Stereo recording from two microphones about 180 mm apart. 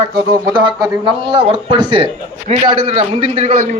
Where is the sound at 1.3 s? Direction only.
25° right (ahead or behind).